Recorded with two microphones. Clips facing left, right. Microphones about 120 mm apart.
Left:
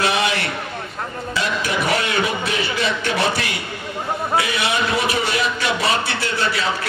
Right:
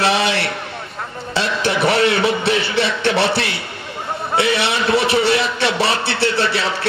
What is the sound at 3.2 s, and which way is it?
Speech, 30° right (ahead or behind).